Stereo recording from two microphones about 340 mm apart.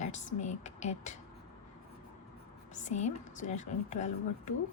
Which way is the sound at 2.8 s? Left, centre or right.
Centre.